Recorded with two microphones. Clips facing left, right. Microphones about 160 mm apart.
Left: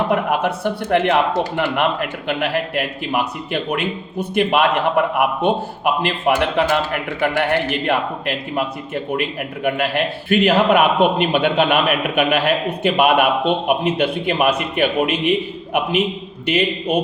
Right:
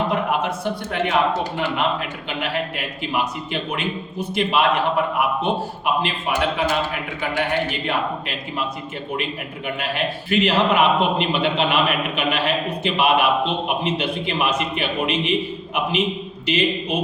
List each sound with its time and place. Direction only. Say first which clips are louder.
0.1 s a man's voice: left 3 dB; 60° left (ahead or behind)
9.6 s a man's voice: left 6 dB; 65° left (ahead or behind)